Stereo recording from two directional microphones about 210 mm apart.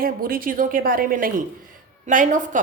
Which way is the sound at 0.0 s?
45° right (ahead or behind).